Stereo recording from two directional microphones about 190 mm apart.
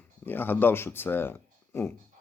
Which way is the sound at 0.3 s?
10° left (ahead or behind).